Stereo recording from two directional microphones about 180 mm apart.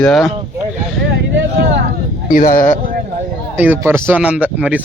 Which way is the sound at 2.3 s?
50° left (ahead or behind).